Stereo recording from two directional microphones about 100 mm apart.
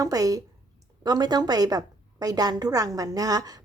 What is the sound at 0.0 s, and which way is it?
A woman's voice, 35° right (ahead or behind).